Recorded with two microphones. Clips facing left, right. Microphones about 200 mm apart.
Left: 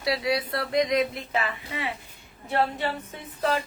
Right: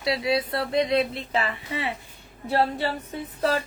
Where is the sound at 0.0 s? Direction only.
25° right (ahead or behind).